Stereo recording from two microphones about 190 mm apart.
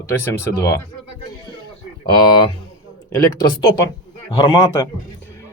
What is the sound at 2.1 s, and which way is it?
Speech, 20° left (ahead or behind).